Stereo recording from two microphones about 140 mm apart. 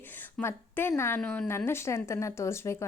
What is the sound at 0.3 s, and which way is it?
A woman's voice, 15° left (ahead or behind).